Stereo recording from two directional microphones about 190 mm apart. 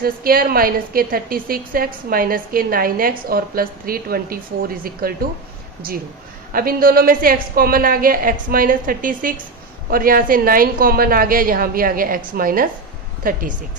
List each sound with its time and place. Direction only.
0.0 s a woman's voice: 50° right (ahead or behind)
6.5 s a woman's voice: 50° right (ahead or behind)